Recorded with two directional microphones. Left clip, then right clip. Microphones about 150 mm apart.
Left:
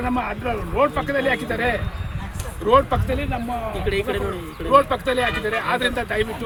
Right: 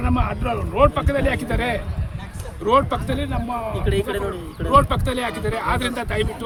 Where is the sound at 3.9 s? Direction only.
90° right.